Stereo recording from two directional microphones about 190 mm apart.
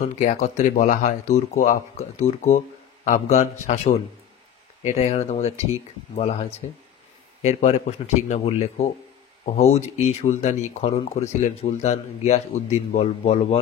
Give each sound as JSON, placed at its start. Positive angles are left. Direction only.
{"t": 0.0, "sound": "speech", "side_deg": 40}
{"t": 7.4, "sound": "speech", "side_deg": 35}